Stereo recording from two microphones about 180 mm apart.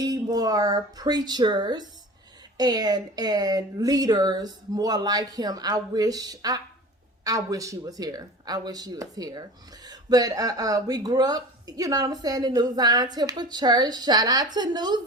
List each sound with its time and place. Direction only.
0.0 s speech: 20° right (ahead or behind)